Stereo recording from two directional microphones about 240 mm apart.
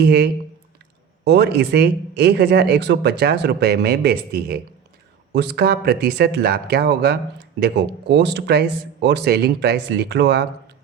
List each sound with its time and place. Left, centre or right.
0.0 s speech: right